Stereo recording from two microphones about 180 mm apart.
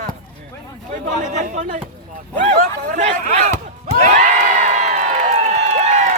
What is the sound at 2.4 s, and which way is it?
Speech, 40° right (ahead or behind).